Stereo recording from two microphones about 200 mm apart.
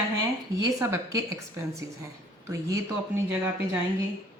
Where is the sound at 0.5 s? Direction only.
15° right (ahead or behind).